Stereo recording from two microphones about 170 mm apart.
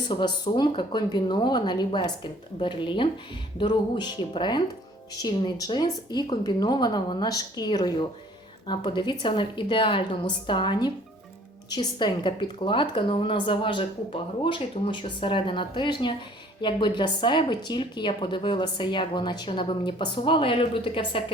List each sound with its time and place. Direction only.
0.1 s a woman's voice: 25° left (ahead or behind)